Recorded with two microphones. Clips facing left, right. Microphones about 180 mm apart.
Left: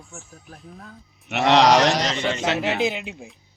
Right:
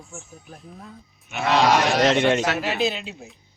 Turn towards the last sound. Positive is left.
turn(degrees=15)  # may be behind; listen again after turning